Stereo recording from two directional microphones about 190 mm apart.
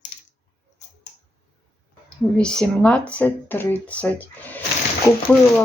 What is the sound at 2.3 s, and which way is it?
Speech, 5° left (ahead or behind).